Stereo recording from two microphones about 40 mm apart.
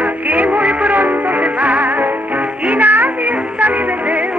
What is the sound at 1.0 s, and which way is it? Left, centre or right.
Music, right.